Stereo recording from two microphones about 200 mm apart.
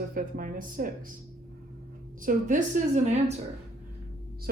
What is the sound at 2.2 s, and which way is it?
A woman's voice, 35° right (ahead or behind).